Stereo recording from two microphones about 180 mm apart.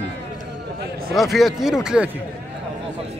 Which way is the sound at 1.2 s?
Centre (ahead or behind).